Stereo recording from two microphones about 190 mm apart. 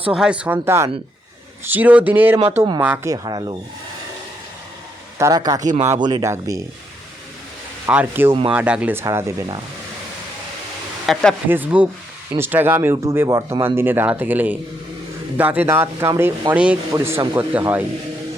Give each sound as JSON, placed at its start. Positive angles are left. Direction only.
{"t": 0.1, "sound": "speech", "side_deg": -5}
{"t": 2.6, "sound": "speech", "side_deg": -25}
{"t": 2.8, "sound": "speech", "side_deg": -10}
{"t": 5.1, "sound": "speech", "side_deg": -20}
{"t": 7.9, "sound": "speech", "side_deg": -10}
{"t": 8.3, "sound": "speech", "side_deg": -30}
{"t": 8.5, "sound": "speech", "side_deg": -5}
{"t": 11.0, "sound": "speech", "side_deg": 0}
{"t": 11.4, "sound": "speech", "side_deg": -10}